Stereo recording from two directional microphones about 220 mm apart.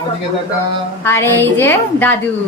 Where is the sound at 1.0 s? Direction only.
10° left (ahead or behind).